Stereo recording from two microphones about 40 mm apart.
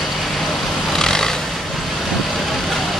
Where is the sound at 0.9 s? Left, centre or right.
Centre.